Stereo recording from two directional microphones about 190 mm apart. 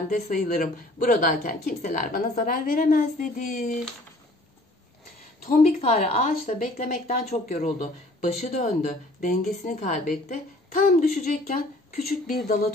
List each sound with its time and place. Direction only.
0.1 s a woman's voice: 45° left (ahead or behind)
5.5 s a woman's voice: 35° left (ahead or behind)